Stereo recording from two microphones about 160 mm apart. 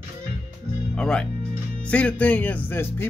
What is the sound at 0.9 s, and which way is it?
Speech, 5° left (ahead or behind).